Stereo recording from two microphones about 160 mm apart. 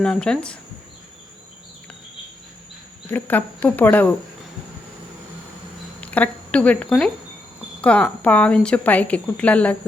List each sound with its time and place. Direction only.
0.0 s speech: 5° left (ahead or behind)
3.1 s speech: 10° left (ahead or behind)
6.0 s speech: 10° left (ahead or behind)